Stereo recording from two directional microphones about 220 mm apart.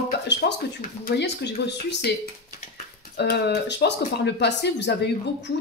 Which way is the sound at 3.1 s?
50° left (ahead or behind).